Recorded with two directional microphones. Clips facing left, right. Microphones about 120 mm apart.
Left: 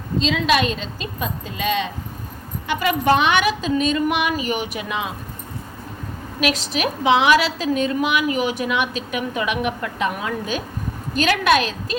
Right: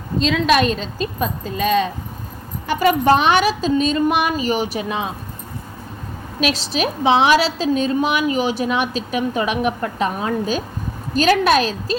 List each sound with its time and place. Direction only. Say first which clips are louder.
0.2 s a woman's voice: right 3 dB; 50° right (ahead or behind)
6.4 s a woman's voice: right 1 dB; 30° right (ahead or behind)